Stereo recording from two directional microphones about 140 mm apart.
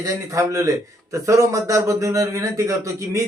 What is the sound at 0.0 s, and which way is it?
A man's voice, 25° right (ahead or behind).